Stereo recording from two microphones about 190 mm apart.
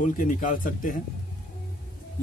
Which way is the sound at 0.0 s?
45° left (ahead or behind).